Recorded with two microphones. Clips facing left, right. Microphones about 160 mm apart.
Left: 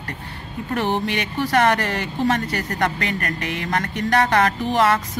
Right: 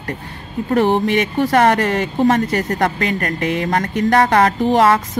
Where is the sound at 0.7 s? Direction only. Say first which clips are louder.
Right 7 dB; 50° right (ahead or behind).